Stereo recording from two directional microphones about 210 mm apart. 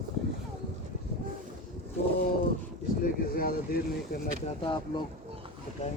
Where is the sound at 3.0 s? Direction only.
45° left (ahead or behind).